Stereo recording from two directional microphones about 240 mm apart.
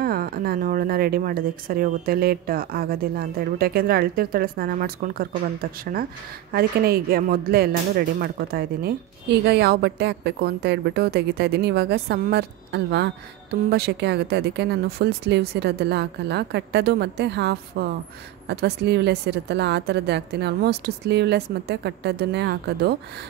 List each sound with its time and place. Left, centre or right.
0.0 s a woman's voice: right